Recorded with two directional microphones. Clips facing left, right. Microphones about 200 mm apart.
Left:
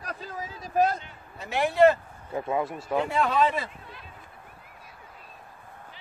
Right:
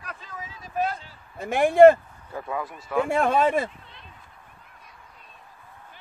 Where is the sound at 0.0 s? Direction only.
40° left (ahead or behind).